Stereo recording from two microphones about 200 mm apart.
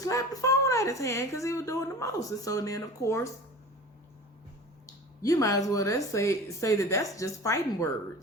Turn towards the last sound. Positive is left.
turn(degrees=15)  # may be behind; listen again after turning